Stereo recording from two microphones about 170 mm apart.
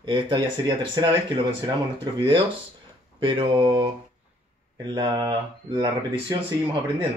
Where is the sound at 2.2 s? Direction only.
30° right (ahead or behind).